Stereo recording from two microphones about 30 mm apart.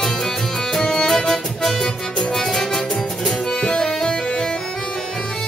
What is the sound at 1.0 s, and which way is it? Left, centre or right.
Music, centre.